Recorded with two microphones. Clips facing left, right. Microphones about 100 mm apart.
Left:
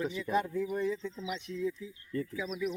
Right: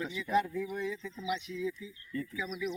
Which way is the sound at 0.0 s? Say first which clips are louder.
Right 1 dB; 40° left (ahead or behind).